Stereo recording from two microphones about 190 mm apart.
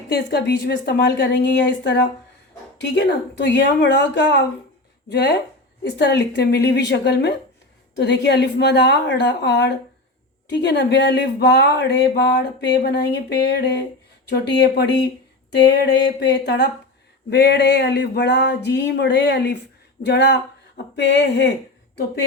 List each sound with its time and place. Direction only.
0.1 s speech: 65° left (ahead or behind)